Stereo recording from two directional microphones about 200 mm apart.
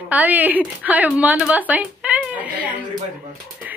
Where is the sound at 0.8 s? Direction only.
5° right (ahead or behind).